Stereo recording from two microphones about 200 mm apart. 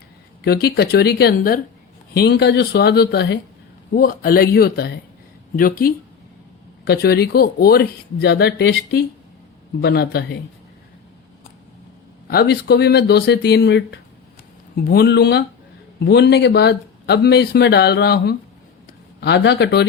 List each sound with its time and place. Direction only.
0.4 s speech: 50° left (ahead or behind)
12.3 s speech: 55° left (ahead or behind)